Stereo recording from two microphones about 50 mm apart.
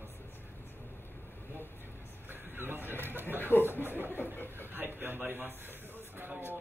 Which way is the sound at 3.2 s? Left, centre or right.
Left.